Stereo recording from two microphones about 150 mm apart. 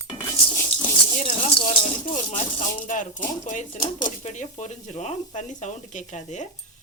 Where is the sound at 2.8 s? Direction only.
55° left (ahead or behind).